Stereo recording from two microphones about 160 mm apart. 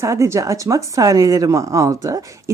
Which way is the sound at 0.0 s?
20° right (ahead or behind).